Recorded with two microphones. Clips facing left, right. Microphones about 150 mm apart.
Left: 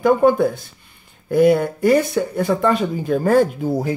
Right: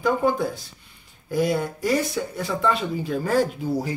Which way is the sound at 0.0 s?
55° left (ahead or behind).